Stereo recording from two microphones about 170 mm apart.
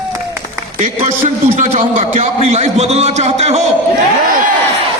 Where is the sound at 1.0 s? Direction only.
45° right (ahead or behind).